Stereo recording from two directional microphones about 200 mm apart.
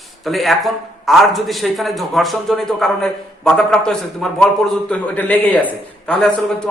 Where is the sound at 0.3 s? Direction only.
Centre (ahead or behind).